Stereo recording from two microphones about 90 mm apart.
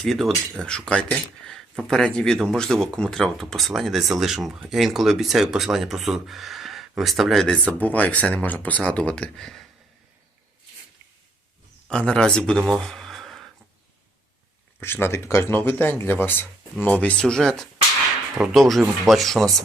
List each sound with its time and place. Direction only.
0.0 s speech: centre (ahead or behind)
11.9 s speech: 10° left (ahead or behind)
14.8 s speech: 25° left (ahead or behind); by 17.7 s 5° left (ahead or behind)
18.3 s speech: 10° right (ahead or behind)
19.0 s speech: centre (ahead or behind)